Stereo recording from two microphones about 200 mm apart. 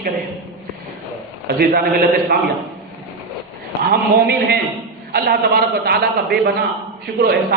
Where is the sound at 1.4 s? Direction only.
50° right (ahead or behind).